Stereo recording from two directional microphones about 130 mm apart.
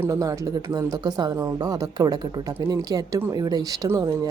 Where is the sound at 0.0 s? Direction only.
25° right (ahead or behind).